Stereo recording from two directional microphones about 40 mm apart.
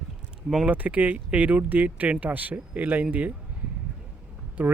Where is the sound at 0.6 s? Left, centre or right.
Right.